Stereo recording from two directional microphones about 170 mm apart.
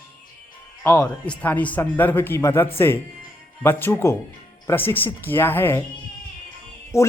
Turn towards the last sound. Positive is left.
turn(degrees=15)  # may be behind; listen again after turning